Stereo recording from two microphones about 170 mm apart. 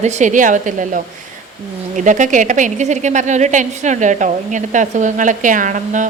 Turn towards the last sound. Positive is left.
turn(degrees=-45)  # may be behind; listen again after turning